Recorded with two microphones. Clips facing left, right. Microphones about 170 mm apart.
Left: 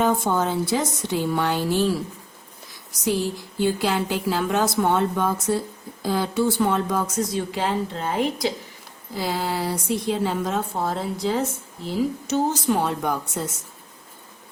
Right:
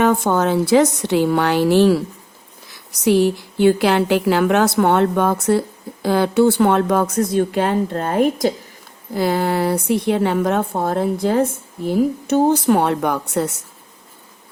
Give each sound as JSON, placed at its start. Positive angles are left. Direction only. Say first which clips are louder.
{"t": 0.0, "sound": "a woman's voice", "louder": "right 5 dB", "side_deg": -70}
{"t": 3.0, "sound": "a woman's voice", "louder": "right 9 dB", "side_deg": -70}